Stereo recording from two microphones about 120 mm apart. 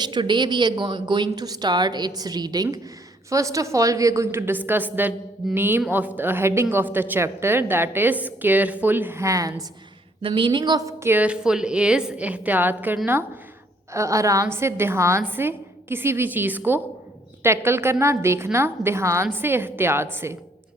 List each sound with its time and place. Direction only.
0.0 s a woman's voice: 40° right (ahead or behind)
10.2 s a woman's voice: 45° right (ahead or behind)
11.1 s a woman's voice: 10° right (ahead or behind)
13.9 s a woman's voice: 25° right (ahead or behind)